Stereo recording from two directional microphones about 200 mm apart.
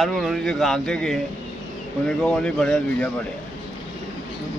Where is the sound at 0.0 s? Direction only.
Centre (ahead or behind).